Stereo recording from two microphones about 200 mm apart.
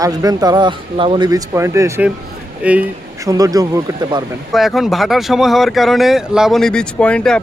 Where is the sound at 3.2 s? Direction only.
15° right (ahead or behind).